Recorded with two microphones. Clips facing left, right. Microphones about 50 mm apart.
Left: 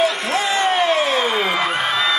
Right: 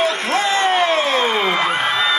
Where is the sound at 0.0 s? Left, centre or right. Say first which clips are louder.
Right 1 dB; right.